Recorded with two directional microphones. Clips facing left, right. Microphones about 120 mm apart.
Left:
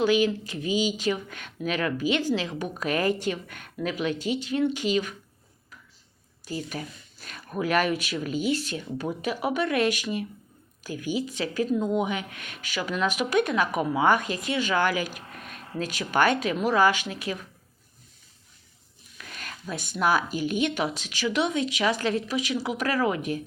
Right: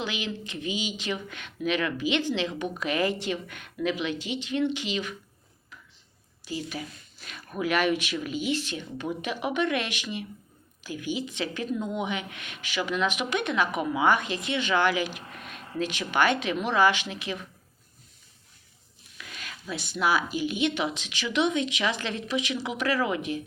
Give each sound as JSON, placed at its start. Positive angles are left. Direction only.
{"t": 0.0, "sound": "speech", "side_deg": 45}
{"t": 6.4, "sound": "speech", "side_deg": 45}
{"t": 19.4, "sound": "speech", "side_deg": 45}